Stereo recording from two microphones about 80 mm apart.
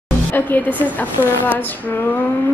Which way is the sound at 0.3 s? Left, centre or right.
Left.